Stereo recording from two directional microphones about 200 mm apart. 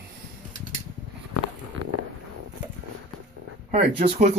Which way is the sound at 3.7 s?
30° right (ahead or behind).